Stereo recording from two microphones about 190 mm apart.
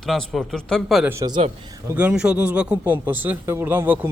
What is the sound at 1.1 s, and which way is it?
Speech, 20° right (ahead or behind).